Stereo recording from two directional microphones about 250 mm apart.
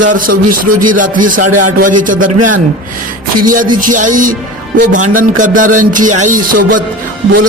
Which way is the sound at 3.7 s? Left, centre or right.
Right.